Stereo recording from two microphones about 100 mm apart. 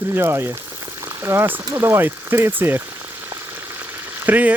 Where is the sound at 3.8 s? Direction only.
20° right (ahead or behind).